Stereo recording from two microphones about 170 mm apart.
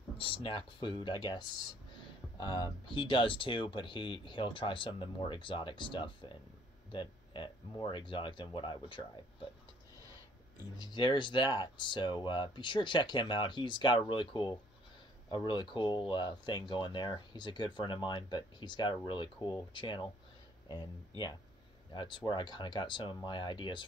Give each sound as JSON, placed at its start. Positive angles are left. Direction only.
{"t": 0.2, "sound": "speech", "side_deg": 30}
{"t": 2.4, "sound": "speech", "side_deg": 25}
{"t": 6.9, "sound": "a sound", "side_deg": 30}
{"t": 7.8, "sound": "speech", "side_deg": 30}
{"t": 10.9, "sound": "speech", "side_deg": 30}
{"t": 21.9, "sound": "speech", "side_deg": 30}